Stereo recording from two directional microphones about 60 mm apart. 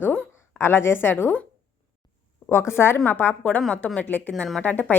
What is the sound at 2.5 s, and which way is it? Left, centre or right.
Speech, left.